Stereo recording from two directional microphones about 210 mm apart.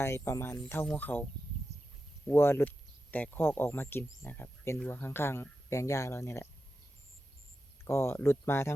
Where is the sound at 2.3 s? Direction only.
10° left (ahead or behind).